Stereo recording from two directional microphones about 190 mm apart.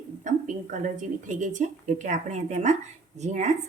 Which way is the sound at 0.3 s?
40° right (ahead or behind).